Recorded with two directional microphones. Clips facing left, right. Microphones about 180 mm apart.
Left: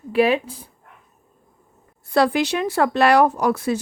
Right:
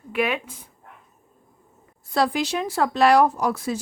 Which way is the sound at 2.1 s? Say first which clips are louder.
Left 4 dB; 65° left (ahead or behind).